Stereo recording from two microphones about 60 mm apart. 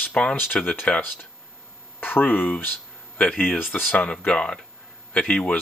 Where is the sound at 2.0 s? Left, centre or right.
Left.